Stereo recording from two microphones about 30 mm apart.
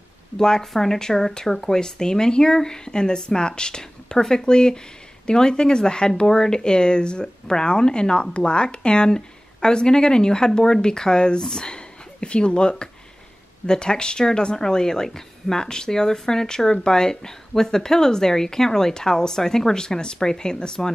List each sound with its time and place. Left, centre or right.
0.4 s speech: centre
11.7 s speech: left